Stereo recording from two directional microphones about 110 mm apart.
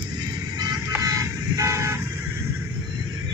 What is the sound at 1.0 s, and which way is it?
Vehicle, 30° right (ahead or behind).